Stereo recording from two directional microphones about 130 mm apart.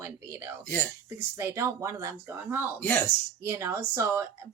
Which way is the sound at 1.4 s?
20° right (ahead or behind).